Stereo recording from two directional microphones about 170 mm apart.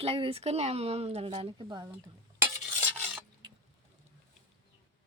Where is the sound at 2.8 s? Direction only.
10° right (ahead or behind).